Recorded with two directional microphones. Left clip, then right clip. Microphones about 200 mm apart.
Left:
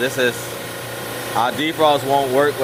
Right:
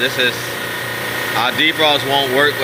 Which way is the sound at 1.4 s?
20° left (ahead or behind).